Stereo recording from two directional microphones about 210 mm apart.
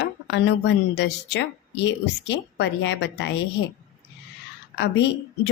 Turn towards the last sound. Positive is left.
turn(degrees=55)  # may be behind; listen again after turning